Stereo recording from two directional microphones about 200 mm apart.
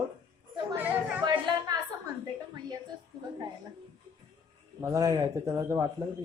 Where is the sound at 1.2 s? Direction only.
20° right (ahead or behind).